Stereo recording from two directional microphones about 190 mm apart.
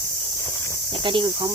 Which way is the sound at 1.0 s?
25° right (ahead or behind).